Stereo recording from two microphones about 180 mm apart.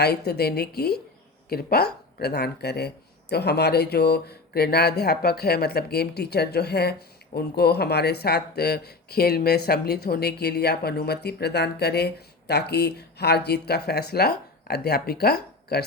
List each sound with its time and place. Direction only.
0.0 s speech: 65° left (ahead or behind)